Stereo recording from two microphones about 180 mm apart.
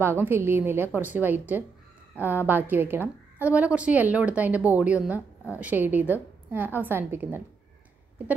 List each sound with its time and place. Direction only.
0.0 s a woman's voice: 15° right (ahead or behind)